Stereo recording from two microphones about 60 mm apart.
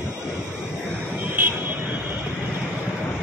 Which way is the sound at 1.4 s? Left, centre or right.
Right.